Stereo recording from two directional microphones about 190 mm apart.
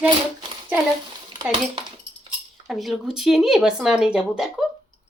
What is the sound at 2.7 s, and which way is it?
Speech, centre (ahead or behind).